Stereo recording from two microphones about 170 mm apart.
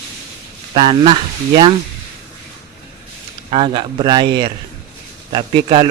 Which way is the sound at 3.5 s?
30° right (ahead or behind).